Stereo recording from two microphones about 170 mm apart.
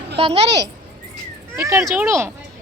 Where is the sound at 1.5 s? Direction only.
15° right (ahead or behind).